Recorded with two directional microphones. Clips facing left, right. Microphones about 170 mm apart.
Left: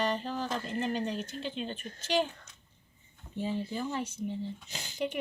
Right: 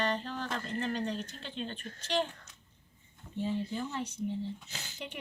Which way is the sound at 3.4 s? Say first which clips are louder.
Even; 10° left (ahead or behind).